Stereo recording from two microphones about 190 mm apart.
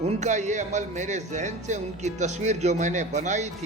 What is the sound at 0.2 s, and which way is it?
Speech, 40° right (ahead or behind).